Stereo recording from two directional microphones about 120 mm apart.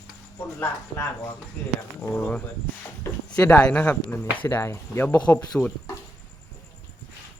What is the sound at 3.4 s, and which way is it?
Speech, 10° left (ahead or behind).